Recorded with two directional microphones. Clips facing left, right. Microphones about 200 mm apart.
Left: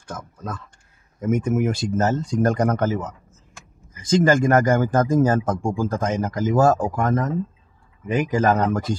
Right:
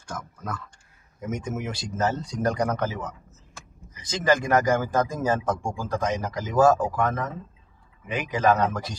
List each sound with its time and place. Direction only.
1.2 s speech: 55° left (ahead or behind)